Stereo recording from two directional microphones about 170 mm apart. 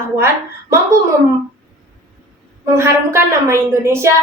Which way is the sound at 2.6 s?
15° right (ahead or behind).